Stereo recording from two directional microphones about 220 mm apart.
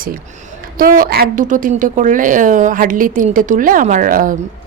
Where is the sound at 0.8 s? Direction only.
40° right (ahead or behind).